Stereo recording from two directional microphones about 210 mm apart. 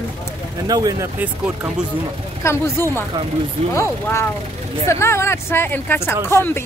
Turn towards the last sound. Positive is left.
turn(degrees=10)  # may be behind; listen again after turning